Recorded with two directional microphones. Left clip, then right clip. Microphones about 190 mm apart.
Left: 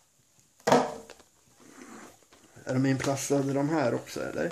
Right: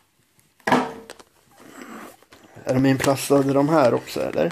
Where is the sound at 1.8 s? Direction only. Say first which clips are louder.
Right 9 dB; 15° right (ahead or behind).